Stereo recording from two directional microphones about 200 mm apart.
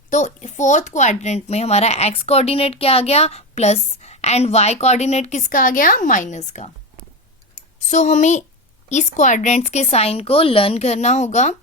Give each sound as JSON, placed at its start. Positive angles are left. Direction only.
{"t": 0.1, "sound": "speech", "side_deg": 35}
{"t": 7.9, "sound": "speech", "side_deg": 35}